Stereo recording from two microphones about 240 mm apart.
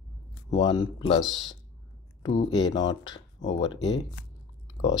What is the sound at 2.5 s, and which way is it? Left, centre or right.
Speech, centre.